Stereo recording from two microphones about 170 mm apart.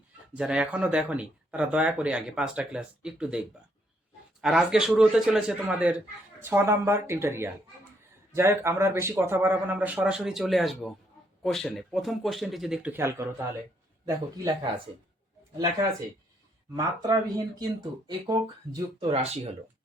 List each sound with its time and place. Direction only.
0.3 s speech: 5° right (ahead or behind)
15.5 s speech: 20° right (ahead or behind); by 19.5 s 40° right (ahead or behind)